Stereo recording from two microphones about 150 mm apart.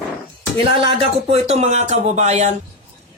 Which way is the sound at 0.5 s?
40° right (ahead or behind).